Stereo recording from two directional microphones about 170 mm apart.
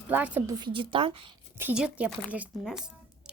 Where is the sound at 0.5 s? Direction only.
30° right (ahead or behind).